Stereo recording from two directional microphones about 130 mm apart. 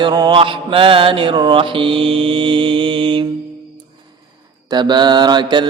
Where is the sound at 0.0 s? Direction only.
35° right (ahead or behind).